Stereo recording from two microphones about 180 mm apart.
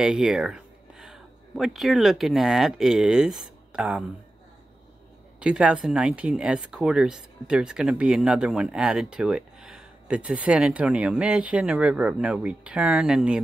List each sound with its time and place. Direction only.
0.0 s speech: centre (ahead or behind)
5.4 s speech: 5° right (ahead or behind)